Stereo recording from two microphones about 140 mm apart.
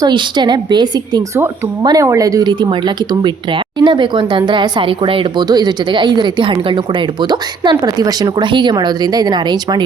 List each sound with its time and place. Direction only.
0.0 s speech: 35° right (ahead or behind)